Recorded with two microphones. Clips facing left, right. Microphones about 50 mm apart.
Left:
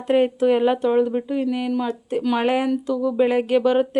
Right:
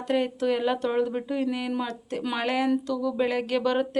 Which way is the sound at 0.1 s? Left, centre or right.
Left.